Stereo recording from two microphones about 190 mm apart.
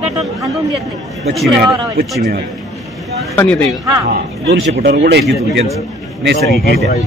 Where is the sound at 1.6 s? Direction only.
55° right (ahead or behind).